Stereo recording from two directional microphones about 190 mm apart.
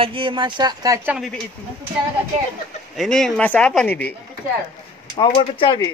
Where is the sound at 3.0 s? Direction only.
Centre (ahead or behind).